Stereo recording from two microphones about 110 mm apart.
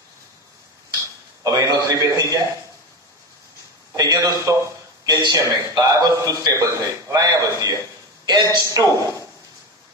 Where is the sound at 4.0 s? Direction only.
35° right (ahead or behind).